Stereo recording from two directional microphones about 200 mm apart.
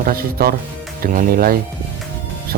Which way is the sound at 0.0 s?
50° right (ahead or behind).